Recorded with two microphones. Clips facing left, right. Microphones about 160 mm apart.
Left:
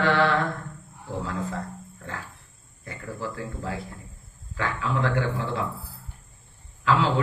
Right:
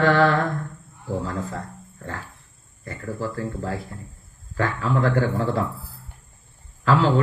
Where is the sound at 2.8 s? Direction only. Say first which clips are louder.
Right 4 dB; 40° right (ahead or behind).